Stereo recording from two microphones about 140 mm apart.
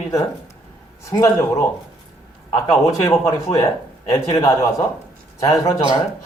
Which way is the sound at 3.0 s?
20° left (ahead or behind).